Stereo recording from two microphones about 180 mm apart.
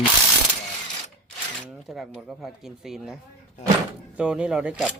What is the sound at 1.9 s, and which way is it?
Speech, 5° right (ahead or behind).